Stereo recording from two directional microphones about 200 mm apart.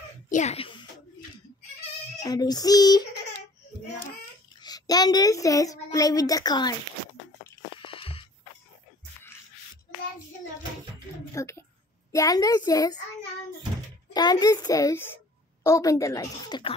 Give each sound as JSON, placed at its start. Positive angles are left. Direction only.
{"t": 0.3, "sound": "a sound", "side_deg": 35}
{"t": 2.2, "sound": "a child's voice", "side_deg": 20}
{"t": 4.6, "sound": "a woman's voice", "side_deg": 20}
{"t": 7.8, "sound": "music", "side_deg": 25}
{"t": 11.3, "sound": "a woman's voice", "side_deg": 15}
{"t": 14.1, "sound": "a child's voice", "side_deg": 20}